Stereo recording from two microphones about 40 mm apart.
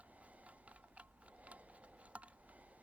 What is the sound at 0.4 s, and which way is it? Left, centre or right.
Tick-tock, right.